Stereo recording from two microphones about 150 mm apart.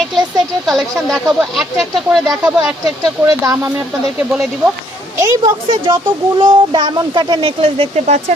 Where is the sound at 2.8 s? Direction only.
25° right (ahead or behind).